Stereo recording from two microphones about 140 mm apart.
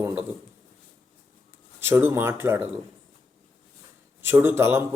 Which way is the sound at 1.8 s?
20° right (ahead or behind).